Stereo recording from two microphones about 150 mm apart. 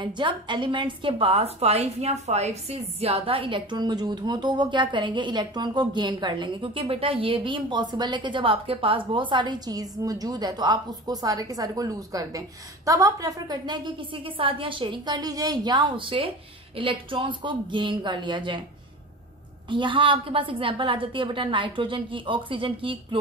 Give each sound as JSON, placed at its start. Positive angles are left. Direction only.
{"t": 0.0, "sound": "a woman's voice", "side_deg": -30}
{"t": 19.7, "sound": "a woman's voice", "side_deg": -35}